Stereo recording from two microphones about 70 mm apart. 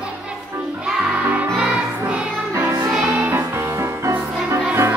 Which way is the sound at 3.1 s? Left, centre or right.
Right.